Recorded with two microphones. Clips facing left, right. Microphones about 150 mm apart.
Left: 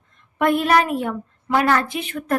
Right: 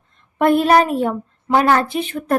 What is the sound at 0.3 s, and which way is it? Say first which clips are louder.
A woman's voice: right 4 dB; 35° right (ahead or behind).